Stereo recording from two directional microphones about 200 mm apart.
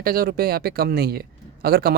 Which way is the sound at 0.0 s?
45° right (ahead or behind).